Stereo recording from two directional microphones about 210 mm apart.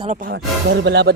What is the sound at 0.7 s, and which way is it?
Speech, 55° right (ahead or behind).